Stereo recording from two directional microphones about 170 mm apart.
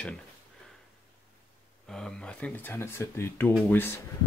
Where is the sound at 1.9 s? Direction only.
5° left (ahead or behind).